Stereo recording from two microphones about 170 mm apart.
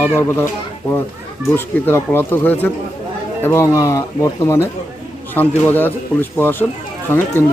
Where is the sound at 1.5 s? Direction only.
10° left (ahead or behind).